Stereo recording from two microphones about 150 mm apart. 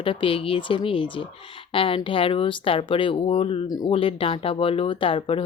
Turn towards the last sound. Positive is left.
turn(degrees=35)  # may be behind; listen again after turning